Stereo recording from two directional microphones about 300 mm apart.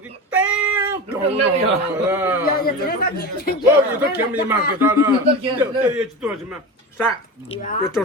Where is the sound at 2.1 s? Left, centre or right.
Centre.